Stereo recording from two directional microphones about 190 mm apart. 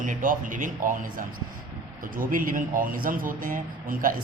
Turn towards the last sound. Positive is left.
turn(degrees=-45)  # may be behind; listen again after turning